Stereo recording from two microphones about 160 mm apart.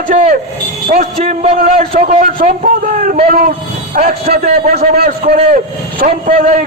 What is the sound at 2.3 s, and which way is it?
A man's voice, 60° right (ahead or behind).